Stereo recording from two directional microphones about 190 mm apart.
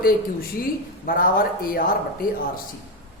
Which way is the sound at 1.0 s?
50° left (ahead or behind).